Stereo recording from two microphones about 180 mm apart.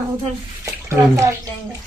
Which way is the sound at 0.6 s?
15° right (ahead or behind).